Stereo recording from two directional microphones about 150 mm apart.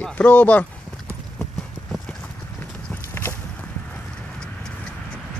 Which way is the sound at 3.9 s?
5° left (ahead or behind).